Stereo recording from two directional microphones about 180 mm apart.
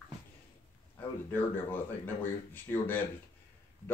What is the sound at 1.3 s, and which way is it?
A man's voice, 10° left (ahead or behind).